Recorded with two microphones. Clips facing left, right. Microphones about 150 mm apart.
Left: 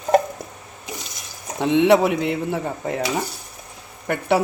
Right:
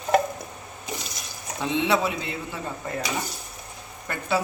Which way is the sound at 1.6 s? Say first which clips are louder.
Left 8 dB; 65° left (ahead or behind).